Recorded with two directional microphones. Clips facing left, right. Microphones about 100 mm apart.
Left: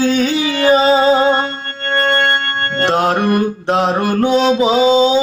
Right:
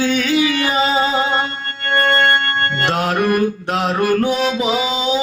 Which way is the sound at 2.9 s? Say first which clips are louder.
Left 4 dB; 30° left (ahead or behind).